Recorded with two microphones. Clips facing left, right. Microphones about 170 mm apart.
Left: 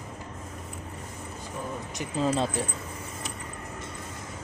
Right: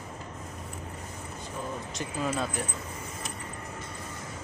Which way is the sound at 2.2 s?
25° left (ahead or behind).